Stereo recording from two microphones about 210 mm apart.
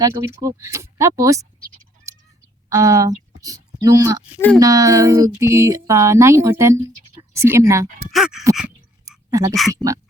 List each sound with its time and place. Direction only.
0.0 s speech: 15° right (ahead or behind)
2.1 s fowl: 15° right (ahead or behind)
2.6 s speech: 15° right (ahead or behind)
4.4 s speech: 5° left (ahead or behind)
4.6 s speech: 15° right (ahead or behind)
8.1 s dog: centre (ahead or behind)
9.0 s a sound: 15° right (ahead or behind)
9.6 s speech: 15° right (ahead or behind)